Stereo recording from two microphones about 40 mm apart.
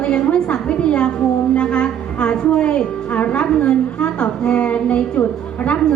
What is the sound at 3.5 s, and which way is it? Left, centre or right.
A woman's voice, left.